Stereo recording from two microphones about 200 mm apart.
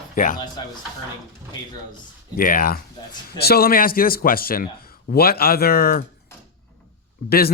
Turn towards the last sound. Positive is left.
turn(degrees=50)  # may be behind; listen again after turning